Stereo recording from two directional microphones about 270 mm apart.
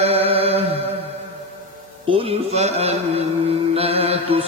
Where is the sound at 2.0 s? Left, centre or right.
Right.